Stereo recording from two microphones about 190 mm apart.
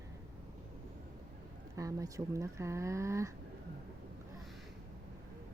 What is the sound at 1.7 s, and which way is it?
Speech, 15° right (ahead or behind).